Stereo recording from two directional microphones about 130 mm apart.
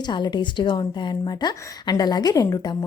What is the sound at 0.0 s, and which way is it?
Speech, 35° left (ahead or behind).